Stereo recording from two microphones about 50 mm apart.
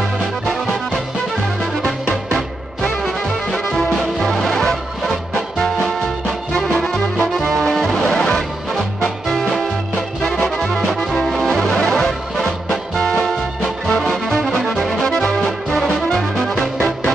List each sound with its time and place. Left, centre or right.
2.3 s music: centre
6.7 s music: centre
7.3 s music: centre
10.9 s music: centre